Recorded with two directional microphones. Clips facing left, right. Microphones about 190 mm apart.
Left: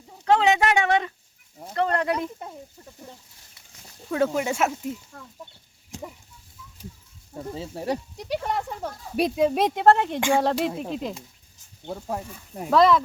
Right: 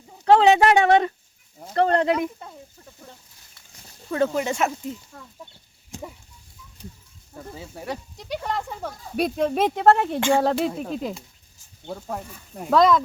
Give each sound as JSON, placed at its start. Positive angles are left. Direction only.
{"t": 0.3, "sound": "speech", "side_deg": -35}
{"t": 4.1, "sound": "speech", "side_deg": 5}
{"t": 7.3, "sound": "speech", "side_deg": 30}
{"t": 8.2, "sound": "speech", "side_deg": 10}
{"t": 8.7, "sound": "speech", "side_deg": 0}
{"t": 10.2, "sound": "speech", "side_deg": 10}
{"t": 10.4, "sound": "speech", "side_deg": 0}
{"t": 11.8, "sound": "speech", "side_deg": 10}